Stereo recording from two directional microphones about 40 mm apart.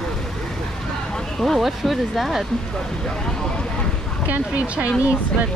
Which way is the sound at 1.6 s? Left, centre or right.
Centre.